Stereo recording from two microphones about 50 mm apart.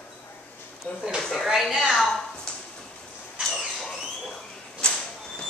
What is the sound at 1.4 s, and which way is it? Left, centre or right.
Speech, centre.